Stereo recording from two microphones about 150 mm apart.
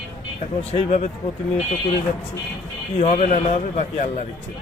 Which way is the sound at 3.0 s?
50° left (ahead or behind).